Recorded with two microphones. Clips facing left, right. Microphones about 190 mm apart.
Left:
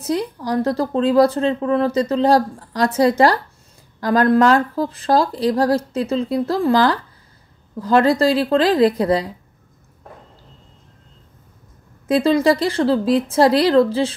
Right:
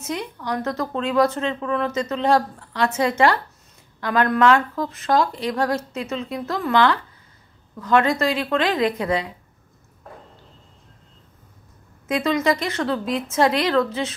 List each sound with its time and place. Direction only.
0.0 s speech: 35° left (ahead or behind)
12.1 s speech: 30° left (ahead or behind)